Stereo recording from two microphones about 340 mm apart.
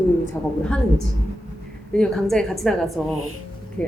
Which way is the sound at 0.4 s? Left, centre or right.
Centre.